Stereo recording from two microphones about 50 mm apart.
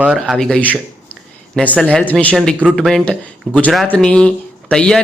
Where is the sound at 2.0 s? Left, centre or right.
Left.